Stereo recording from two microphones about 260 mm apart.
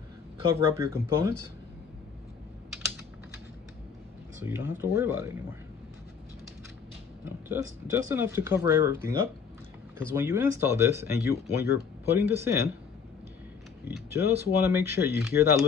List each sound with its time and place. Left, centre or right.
0.6 s speech: centre
4.4 s speech: centre
7.4 s speech: centre
13.8 s speech: centre